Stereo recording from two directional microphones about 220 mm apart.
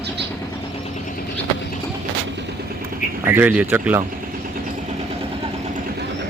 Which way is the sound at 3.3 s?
10° right (ahead or behind).